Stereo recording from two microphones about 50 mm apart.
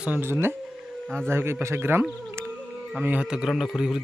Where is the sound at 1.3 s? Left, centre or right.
Right.